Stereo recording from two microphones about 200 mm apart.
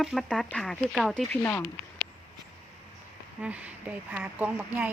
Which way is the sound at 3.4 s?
5° right (ahead or behind).